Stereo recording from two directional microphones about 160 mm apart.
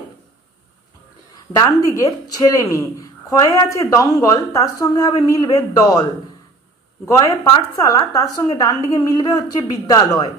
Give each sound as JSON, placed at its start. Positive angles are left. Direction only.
{"t": 1.5, "sound": "a woman's voice", "side_deg": 20}
{"t": 7.1, "sound": "a woman's voice", "side_deg": 20}